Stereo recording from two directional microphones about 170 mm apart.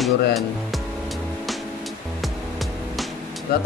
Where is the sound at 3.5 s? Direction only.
65° left (ahead or behind).